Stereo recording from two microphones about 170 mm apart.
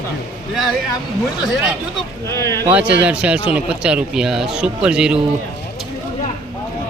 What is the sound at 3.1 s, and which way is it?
A man's voice, 5° right (ahead or behind).